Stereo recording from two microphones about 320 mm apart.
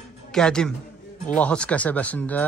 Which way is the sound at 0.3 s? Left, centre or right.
Centre.